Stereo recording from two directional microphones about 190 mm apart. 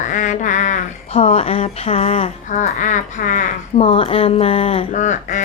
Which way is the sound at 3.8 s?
30° left (ahead or behind).